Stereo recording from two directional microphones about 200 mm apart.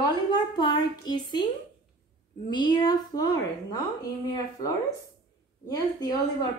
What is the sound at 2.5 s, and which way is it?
A woman's voice, 20° left (ahead or behind).